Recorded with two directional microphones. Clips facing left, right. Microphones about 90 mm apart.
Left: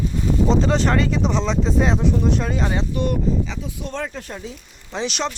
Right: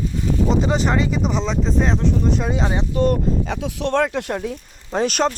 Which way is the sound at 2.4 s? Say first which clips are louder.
Right 1 dB; 15° right (ahead or behind).